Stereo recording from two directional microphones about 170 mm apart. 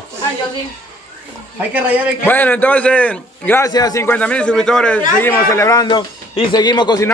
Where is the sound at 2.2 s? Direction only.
10° left (ahead or behind).